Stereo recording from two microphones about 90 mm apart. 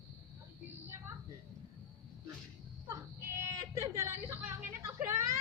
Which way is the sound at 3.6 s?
35° right (ahead or behind).